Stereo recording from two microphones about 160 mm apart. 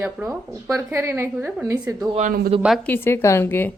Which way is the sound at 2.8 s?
10° left (ahead or behind).